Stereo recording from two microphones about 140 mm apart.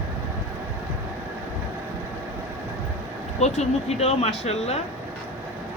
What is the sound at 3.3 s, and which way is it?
Speech, 55° left (ahead or behind).